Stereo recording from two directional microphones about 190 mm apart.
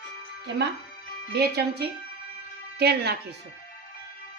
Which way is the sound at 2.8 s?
55° right (ahead or behind).